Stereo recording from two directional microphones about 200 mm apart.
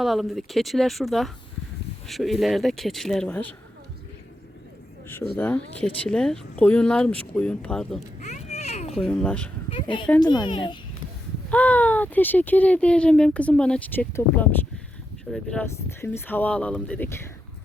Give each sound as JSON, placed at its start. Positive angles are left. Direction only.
{"t": 0.0, "sound": "speech", "side_deg": 0}
{"t": 5.4, "sound": "speech", "side_deg": 5}
{"t": 8.2, "sound": "a sound", "side_deg": 35}
{"t": 8.9, "sound": "speech", "side_deg": 5}
{"t": 10.2, "sound": "a child's voice", "side_deg": 20}
{"t": 11.4, "sound": "speech", "side_deg": 5}